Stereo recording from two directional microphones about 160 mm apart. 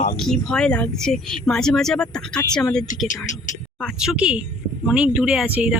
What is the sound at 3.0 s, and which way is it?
Speech, 50° left (ahead or behind).